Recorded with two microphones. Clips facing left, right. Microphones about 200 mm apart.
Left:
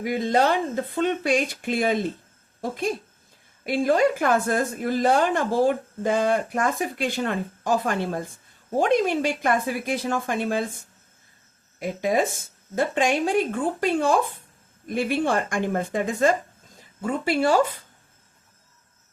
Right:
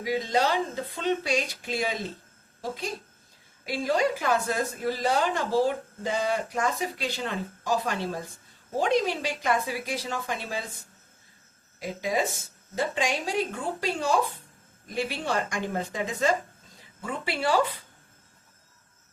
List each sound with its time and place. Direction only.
0.0 s a woman's voice: 55° left (ahead or behind)